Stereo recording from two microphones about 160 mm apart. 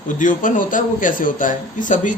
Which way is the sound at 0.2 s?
55° left (ahead or behind).